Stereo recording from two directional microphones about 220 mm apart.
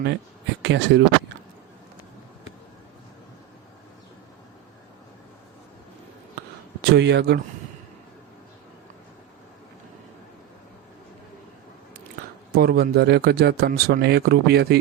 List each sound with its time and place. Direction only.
0.6 s speech: 50° right (ahead or behind)
6.8 s speech: 50° right (ahead or behind)
12.5 s speech: 45° right (ahead or behind)